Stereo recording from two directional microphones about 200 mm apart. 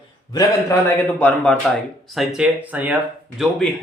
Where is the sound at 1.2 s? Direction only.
5° left (ahead or behind).